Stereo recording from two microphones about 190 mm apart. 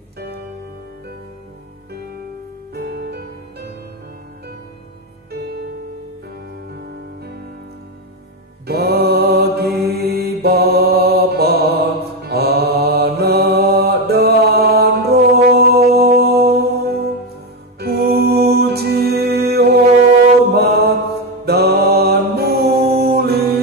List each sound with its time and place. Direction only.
2.7 s music: 60° right (ahead or behind)
8.6 s mantra: 55° right (ahead or behind)
17.7 s music: 55° right (ahead or behind)
20.5 s mantra: 55° right (ahead or behind)